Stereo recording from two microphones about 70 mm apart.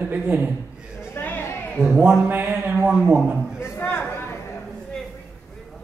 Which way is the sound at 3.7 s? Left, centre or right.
Left.